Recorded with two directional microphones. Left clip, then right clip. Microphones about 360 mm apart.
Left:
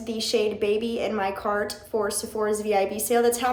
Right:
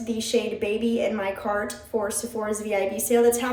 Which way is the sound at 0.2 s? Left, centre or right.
Centre.